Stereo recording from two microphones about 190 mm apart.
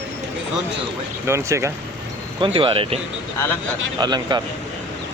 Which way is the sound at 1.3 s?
15° right (ahead or behind).